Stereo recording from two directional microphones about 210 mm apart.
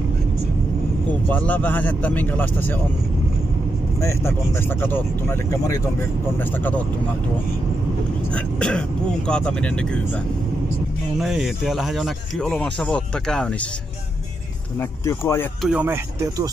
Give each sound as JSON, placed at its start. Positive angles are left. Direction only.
{"t": 1.3, "sound": "speech", "side_deg": 5}
{"t": 4.0, "sound": "speech", "side_deg": 10}
{"t": 8.3, "sound": "speech", "side_deg": 5}
{"t": 14.8, "sound": "speech", "side_deg": 10}
{"t": 15.6, "sound": "speech", "side_deg": -5}